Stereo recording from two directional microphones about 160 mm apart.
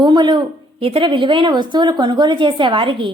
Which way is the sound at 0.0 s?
30° right (ahead or behind).